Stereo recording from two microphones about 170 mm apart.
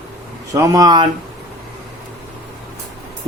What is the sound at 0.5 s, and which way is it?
Speech, 20° right (ahead or behind).